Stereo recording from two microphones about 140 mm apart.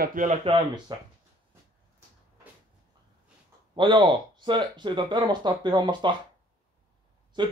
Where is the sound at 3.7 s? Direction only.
35° right (ahead or behind).